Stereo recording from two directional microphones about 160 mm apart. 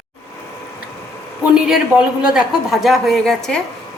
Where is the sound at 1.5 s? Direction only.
5° right (ahead or behind).